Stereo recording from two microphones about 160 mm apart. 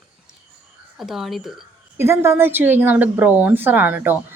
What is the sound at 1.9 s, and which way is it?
Speech, 15° right (ahead or behind).